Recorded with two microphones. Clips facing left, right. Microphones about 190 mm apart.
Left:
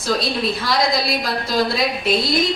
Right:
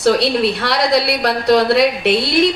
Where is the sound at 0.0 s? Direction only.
70° right (ahead or behind).